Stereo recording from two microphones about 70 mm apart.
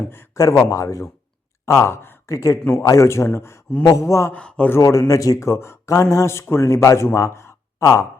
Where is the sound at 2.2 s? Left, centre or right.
Left.